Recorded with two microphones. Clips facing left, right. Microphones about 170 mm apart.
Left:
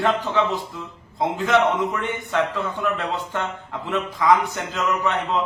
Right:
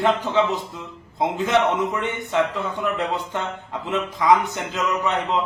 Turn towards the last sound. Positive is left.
turn(degrees=-20)  # may be behind; listen again after turning